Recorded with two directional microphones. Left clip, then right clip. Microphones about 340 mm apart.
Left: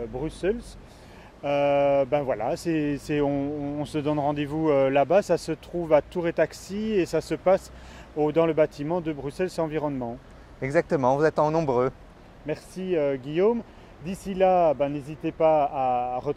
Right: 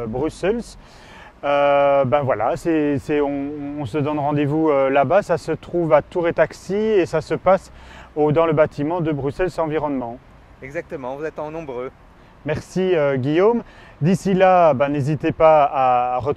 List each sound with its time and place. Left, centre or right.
0.2 s speech: right
10.6 s speech: left
12.4 s speech: right